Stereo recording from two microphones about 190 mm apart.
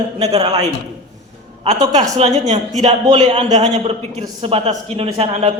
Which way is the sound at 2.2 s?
35° right (ahead or behind).